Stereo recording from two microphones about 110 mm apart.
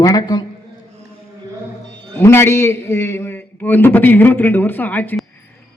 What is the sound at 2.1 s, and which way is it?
A man's voice, 20° left (ahead or behind).